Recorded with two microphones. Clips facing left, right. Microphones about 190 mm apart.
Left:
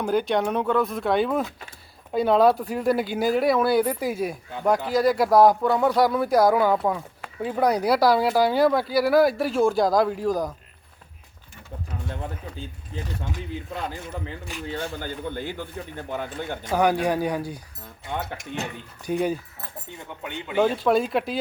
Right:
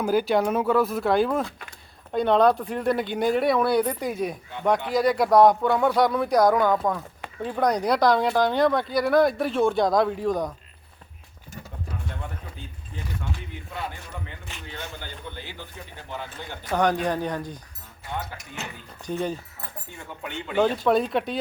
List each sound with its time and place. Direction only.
0.0 s speech: 5° right (ahead or behind)
13.9 s speech: 30° left (ahead or behind)
15.3 s speech: 50° left (ahead or behind)
16.7 s speech: 10° left (ahead or behind)
18.6 s speech: 35° left (ahead or behind)
19.0 s speech: 10° left (ahead or behind)
20.6 s speech: 5° left (ahead or behind)